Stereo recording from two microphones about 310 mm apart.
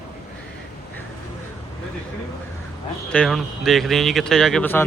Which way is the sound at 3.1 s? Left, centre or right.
Centre.